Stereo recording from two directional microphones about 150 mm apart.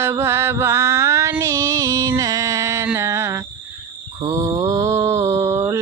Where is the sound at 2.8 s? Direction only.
20° right (ahead or behind).